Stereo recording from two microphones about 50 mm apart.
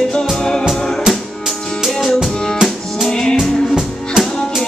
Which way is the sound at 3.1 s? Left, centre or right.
Centre.